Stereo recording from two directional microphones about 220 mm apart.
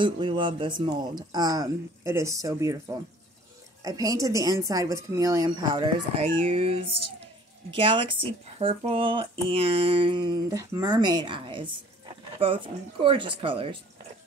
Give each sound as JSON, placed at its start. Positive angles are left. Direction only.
{"t": 0.0, "sound": "speech", "side_deg": -20}
{"t": 6.3, "sound": "speech", "side_deg": -30}